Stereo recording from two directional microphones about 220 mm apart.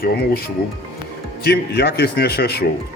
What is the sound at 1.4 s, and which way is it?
A man's voice, 50° left (ahead or behind).